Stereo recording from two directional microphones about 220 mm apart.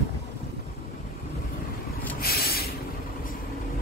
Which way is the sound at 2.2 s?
45° left (ahead or behind).